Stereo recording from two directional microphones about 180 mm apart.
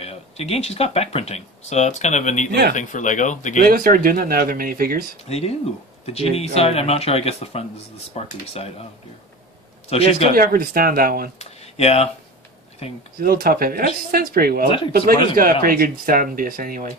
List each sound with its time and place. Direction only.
0.0 s speech: 35° left (ahead or behind)
3.6 s speech: 55° right (ahead or behind)
5.3 s speech: 35° left (ahead or behind)
9.8 s speech: 35° left (ahead or behind)
10.3 s speech: 55° right (ahead or behind)
11.3 s a sound: 35° left (ahead or behind)
13.2 s speech: 55° right (ahead or behind)